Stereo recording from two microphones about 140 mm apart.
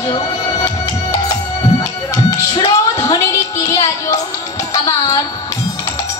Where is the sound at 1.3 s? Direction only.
25° left (ahead or behind).